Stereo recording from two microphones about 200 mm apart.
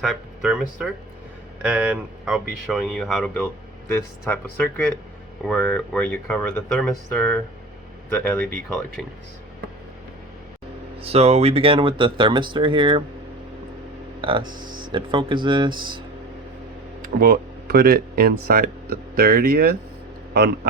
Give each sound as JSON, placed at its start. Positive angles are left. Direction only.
{"t": 0.0, "sound": "speech", "side_deg": 0}
{"t": 11.0, "sound": "speech", "side_deg": -30}
{"t": 14.2, "sound": "a sound", "side_deg": -25}
{"t": 14.6, "sound": "speech", "side_deg": -20}
{"t": 17.0, "sound": "speech", "side_deg": -50}